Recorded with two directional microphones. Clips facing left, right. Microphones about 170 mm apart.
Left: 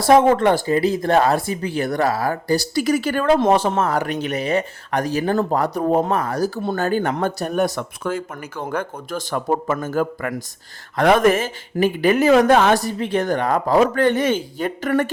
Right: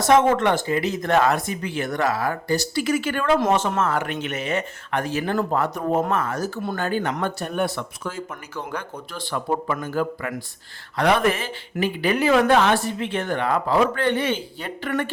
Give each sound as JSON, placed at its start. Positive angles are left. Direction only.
{"t": 0.0, "sound": "speech", "side_deg": 35}
{"t": 6.7, "sound": "speech", "side_deg": 45}
{"t": 8.0, "sound": "speech", "side_deg": 55}